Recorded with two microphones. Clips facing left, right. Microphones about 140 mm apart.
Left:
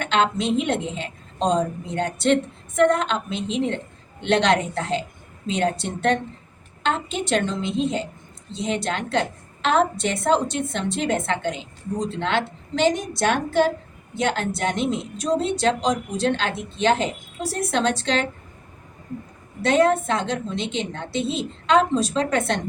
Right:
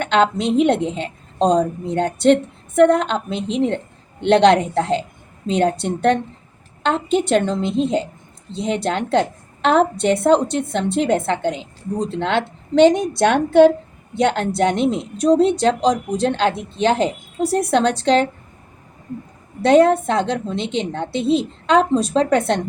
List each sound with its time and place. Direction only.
0.0 s a woman's voice: 55° right (ahead or behind)
19.6 s a woman's voice: 55° right (ahead or behind)